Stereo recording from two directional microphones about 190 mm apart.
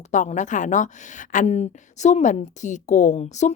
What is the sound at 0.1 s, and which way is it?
A woman's voice, 40° left (ahead or behind).